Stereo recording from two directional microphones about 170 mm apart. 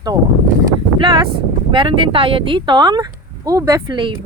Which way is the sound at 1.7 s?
30° right (ahead or behind).